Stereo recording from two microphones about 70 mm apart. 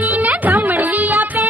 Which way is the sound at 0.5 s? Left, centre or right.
Right.